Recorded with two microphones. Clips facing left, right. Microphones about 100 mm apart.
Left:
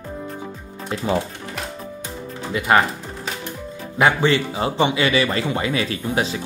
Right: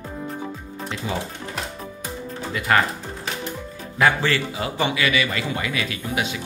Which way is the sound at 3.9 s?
20° left (ahead or behind).